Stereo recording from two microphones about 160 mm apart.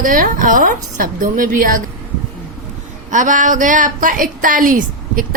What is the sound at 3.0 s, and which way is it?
Speech, 50° right (ahead or behind).